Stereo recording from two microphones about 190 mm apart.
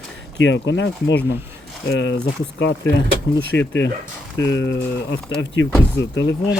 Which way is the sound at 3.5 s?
70° left (ahead or behind).